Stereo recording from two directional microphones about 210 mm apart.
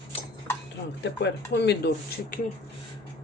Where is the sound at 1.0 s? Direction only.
55° left (ahead or behind).